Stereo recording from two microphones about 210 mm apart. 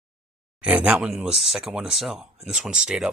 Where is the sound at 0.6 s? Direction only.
5° right (ahead or behind).